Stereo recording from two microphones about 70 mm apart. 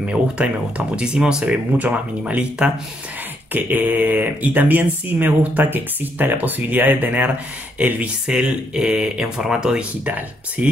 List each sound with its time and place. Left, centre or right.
0.0 s speech: centre
8.3 s speech: centre